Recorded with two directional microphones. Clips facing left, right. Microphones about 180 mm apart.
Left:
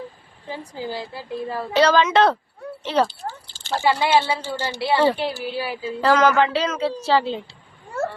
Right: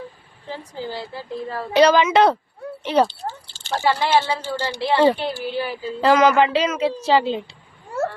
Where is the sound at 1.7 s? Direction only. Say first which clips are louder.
Right 2 dB; 15° right (ahead or behind).